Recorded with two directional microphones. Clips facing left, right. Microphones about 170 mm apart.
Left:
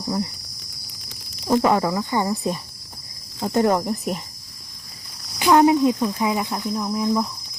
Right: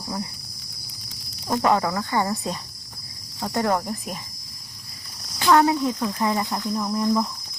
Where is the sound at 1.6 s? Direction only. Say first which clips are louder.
Left 2 dB; 20° left (ahead or behind).